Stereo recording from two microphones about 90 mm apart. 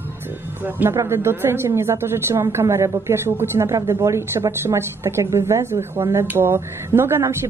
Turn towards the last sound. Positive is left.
turn(degrees=-25)  # may be behind; listen again after turning